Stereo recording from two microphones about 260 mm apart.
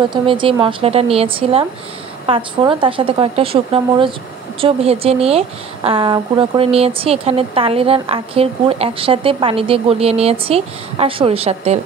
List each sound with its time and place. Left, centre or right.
0.1 s a woman's voice: centre